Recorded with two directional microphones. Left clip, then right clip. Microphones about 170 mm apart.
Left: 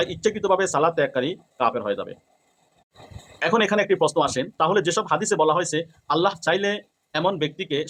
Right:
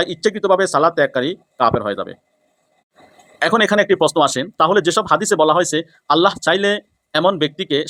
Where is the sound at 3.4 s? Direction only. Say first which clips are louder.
Right 6 dB; 35° right (ahead or behind).